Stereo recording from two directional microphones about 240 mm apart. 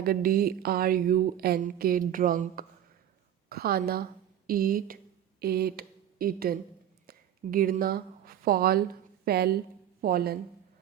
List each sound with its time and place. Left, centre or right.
0.0 s a woman's voice: right
5.4 s a sound: right
7.1 s a woman's voice: right